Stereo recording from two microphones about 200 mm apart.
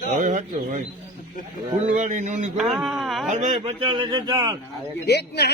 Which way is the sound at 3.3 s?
40° right (ahead or behind).